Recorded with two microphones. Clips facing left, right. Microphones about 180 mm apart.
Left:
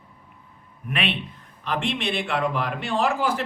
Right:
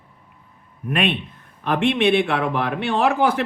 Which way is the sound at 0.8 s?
45° right (ahead or behind).